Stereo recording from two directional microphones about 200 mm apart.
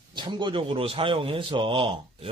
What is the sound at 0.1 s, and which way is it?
Speech, 20° right (ahead or behind).